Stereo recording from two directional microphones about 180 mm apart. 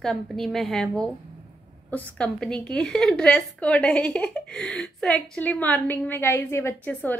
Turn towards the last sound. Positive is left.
turn(degrees=10)  # may be behind; listen again after turning